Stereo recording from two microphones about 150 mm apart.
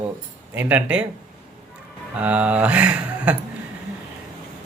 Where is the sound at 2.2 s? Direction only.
10° right (ahead or behind).